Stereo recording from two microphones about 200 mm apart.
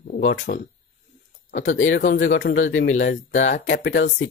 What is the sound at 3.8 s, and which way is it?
Speech, 60° left (ahead or behind).